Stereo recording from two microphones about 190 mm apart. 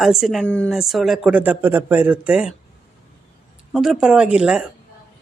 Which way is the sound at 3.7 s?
5° right (ahead or behind).